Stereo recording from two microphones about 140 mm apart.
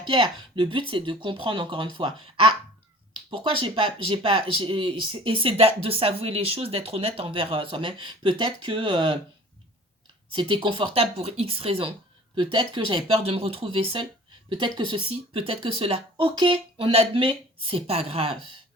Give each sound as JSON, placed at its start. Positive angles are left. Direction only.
{"t": 0.0, "sound": "speech", "side_deg": -35}
{"t": 10.3, "sound": "speech", "side_deg": -35}